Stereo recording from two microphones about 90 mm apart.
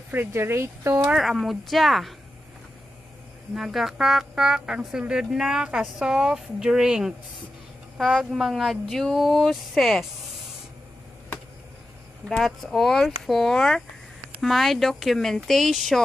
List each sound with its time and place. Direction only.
0.1 s speech: 25° right (ahead or behind)
1.1 s speech: centre (ahead or behind)
3.5 s speech: centre (ahead or behind)
12.3 s speech: centre (ahead or behind)